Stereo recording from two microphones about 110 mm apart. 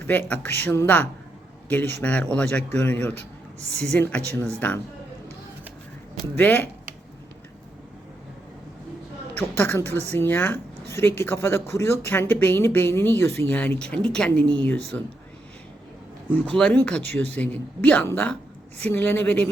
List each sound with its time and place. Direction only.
0.1 s speech: 15° left (ahead or behind)
6.3 s speech: 15° left (ahead or behind)
9.3 s speech: 15° left (ahead or behind)
16.3 s speech: 10° left (ahead or behind)